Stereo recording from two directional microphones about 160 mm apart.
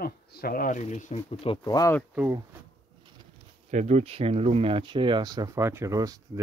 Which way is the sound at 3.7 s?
45° right (ahead or behind).